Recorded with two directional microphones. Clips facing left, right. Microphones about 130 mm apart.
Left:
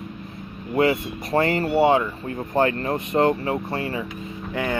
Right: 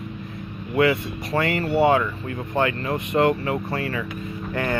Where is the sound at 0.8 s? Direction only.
35° left (ahead or behind).